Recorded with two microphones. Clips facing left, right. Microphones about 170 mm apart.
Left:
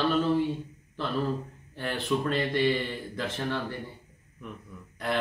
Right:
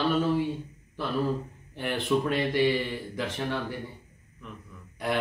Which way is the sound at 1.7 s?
15° right (ahead or behind).